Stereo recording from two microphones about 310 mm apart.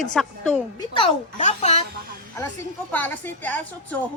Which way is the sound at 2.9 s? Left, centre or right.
Centre.